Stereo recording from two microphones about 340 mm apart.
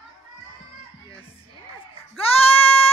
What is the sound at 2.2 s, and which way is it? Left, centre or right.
Sheep, centre.